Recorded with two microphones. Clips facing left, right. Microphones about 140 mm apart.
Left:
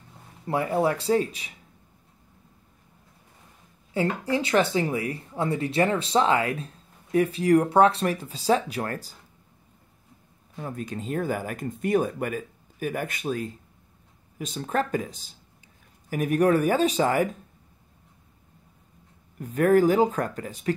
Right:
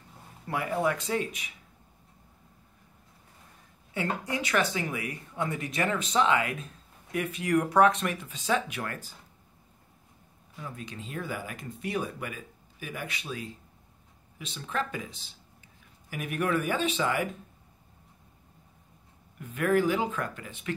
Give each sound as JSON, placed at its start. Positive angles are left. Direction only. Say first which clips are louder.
{"t": 0.5, "sound": "speech", "louder": "left 5 dB", "side_deg": 30}
{"t": 3.9, "sound": "speech", "louder": "left 6 dB", "side_deg": 30}
{"t": 10.5, "sound": "speech", "louder": "left 8 dB", "side_deg": 45}
{"t": 19.3, "sound": "speech", "louder": "left 6 dB", "side_deg": 40}